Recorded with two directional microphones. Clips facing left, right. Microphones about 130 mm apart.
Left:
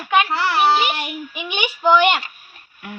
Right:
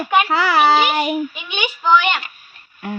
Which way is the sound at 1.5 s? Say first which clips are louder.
Left 1 dB; 10° left (ahead or behind).